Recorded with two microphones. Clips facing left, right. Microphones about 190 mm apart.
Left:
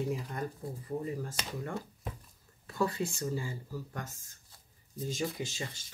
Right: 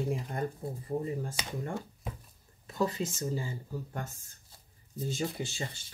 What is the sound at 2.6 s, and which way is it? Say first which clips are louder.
Speech: right 1 dB; 20° right (ahead or behind).